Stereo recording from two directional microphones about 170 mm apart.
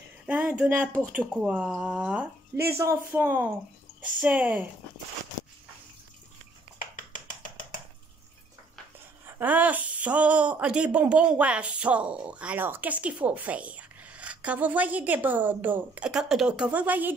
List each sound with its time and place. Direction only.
0.3 s a woman's voice: 5° right (ahead or behind)
7.0 s finger snapping: 50° left (ahead or behind)
9.2 s a woman's voice: 10° right (ahead or behind)